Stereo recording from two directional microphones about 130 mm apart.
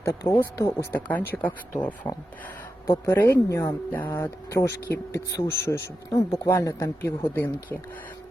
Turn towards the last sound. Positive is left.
turn(degrees=15)  # may be behind; listen again after turning